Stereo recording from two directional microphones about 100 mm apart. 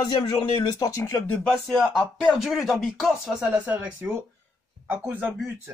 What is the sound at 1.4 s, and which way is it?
Speech, 5° left (ahead or behind).